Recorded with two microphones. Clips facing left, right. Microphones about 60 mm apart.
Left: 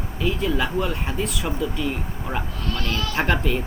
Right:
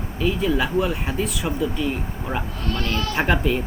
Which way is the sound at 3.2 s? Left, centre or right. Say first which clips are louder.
Right 1 dB; centre.